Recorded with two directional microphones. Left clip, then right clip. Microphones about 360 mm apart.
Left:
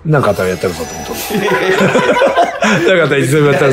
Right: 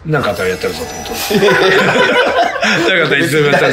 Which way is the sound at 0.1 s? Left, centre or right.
Centre.